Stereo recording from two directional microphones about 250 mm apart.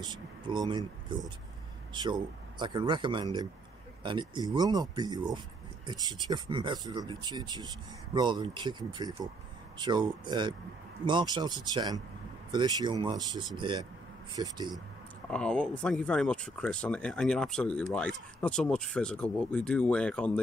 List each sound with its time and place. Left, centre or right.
0.0 s speech: centre
15.2 s speech: centre